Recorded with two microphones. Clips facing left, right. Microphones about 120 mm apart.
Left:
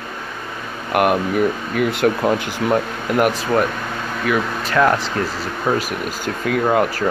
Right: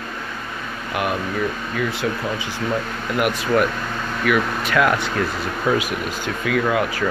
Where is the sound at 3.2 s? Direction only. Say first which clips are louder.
Left 2 dB; 35° left (ahead or behind).